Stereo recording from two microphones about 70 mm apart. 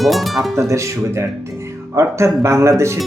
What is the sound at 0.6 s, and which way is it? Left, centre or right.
Speech, right.